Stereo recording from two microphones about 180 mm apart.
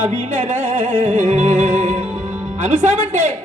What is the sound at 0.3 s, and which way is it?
Music, 40° right (ahead or behind).